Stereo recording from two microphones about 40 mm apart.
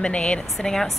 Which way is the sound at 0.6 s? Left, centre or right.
Centre.